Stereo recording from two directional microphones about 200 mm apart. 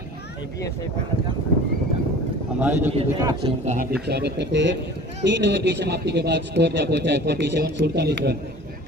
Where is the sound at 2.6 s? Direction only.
10° right (ahead or behind).